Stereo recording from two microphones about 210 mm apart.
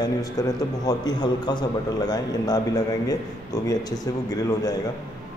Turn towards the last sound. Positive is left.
turn(degrees=20)  # may be behind; listen again after turning